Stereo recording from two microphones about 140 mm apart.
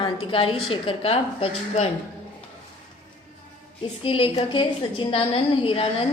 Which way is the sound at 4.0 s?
40° left (ahead or behind).